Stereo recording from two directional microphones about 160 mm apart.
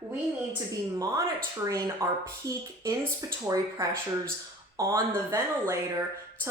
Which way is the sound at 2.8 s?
20° right (ahead or behind).